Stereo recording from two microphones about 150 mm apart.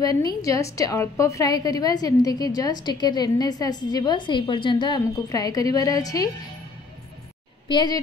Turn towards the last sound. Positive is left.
turn(degrees=30)  # may be behind; listen again after turning